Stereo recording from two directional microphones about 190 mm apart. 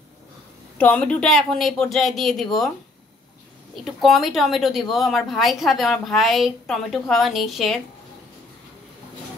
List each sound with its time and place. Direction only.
0.7 s speech: 5° left (ahead or behind)
3.7 s speech: centre (ahead or behind)